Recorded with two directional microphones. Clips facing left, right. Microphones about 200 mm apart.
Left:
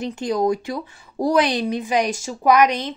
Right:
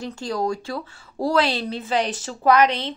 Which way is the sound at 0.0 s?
20° left (ahead or behind).